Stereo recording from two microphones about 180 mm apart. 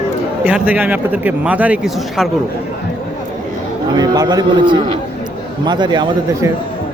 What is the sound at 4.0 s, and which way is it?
Speech, 20° right (ahead or behind).